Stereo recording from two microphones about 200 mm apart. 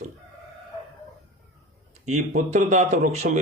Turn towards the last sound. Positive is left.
turn(degrees=-35)  # may be behind; listen again after turning